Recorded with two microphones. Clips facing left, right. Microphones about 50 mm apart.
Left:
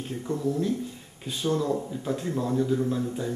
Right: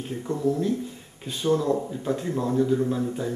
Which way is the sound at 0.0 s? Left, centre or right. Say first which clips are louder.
Right 3 dB; centre.